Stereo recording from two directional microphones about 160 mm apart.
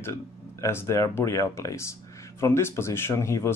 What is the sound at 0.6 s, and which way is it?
Speech, 15° left (ahead or behind).